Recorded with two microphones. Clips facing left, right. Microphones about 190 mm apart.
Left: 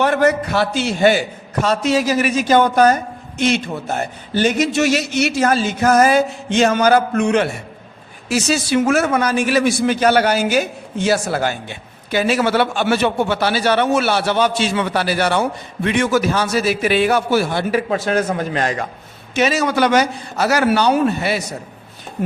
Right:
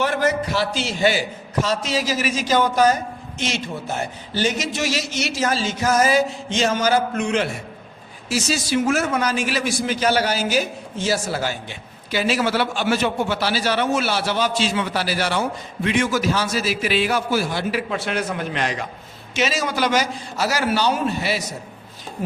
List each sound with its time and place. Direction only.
0.0 s a man's voice: 60° left (ahead or behind)
19.4 s a man's voice: 60° left (ahead or behind)